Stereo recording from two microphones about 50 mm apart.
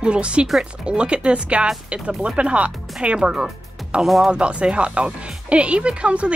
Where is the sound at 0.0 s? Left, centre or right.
Right.